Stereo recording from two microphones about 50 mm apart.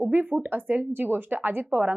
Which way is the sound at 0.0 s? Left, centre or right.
Right.